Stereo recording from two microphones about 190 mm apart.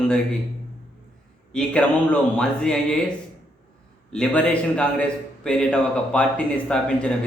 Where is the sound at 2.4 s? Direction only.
5° left (ahead or behind).